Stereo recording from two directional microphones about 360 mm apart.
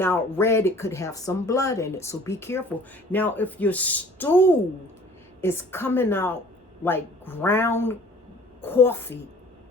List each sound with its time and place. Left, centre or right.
0.0 s speech: centre